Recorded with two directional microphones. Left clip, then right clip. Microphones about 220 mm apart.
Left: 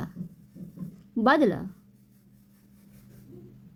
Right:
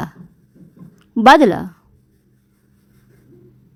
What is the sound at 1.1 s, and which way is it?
Speech, 40° right (ahead or behind).